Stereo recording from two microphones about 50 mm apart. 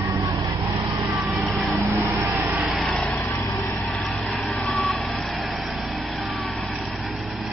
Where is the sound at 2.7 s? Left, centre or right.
Centre.